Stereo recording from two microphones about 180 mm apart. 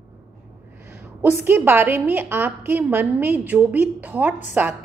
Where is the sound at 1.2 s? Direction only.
10° right (ahead or behind).